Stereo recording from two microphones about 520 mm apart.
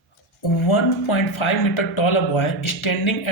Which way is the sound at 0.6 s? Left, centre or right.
Left.